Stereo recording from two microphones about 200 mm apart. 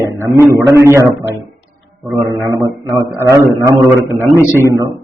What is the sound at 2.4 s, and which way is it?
A man's voice, 15° right (ahead or behind).